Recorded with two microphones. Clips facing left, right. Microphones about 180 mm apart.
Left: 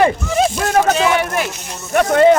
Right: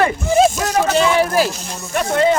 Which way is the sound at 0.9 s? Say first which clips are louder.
Right 2 dB; 30° right (ahead or behind).